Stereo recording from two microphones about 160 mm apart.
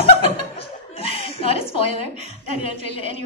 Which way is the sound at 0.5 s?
35° left (ahead or behind).